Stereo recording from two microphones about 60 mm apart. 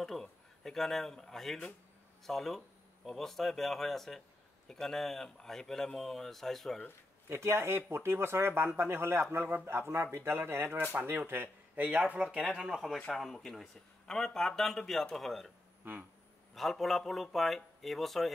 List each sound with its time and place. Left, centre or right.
0.0 s speech: centre
7.2 s a man's voice: right
10.9 s a man's voice: right
12.2 s speech: centre
12.4 s speech: centre
15.8 s speech: right
16.5 s speech: centre